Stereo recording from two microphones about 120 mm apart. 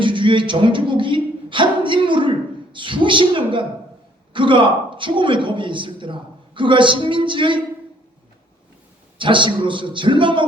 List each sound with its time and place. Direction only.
0.0 s a woman's voice: 45° right (ahead or behind)
9.1 s a man's voice: 45° right (ahead or behind)